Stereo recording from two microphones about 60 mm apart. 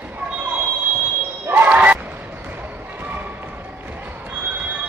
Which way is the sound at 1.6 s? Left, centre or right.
Right.